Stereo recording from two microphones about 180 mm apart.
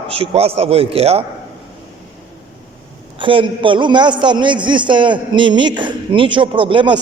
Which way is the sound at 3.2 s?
30° right (ahead or behind).